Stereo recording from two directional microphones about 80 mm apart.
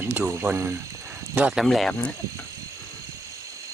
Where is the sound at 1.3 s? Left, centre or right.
Centre.